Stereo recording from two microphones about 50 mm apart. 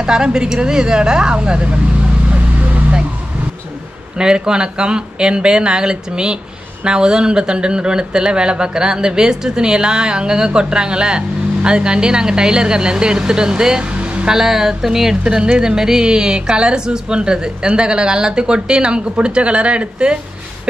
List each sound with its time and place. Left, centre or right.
0.0 s speech: centre
2.3 s vehicle: right
4.2 s speech: centre
14.3 s speech: centre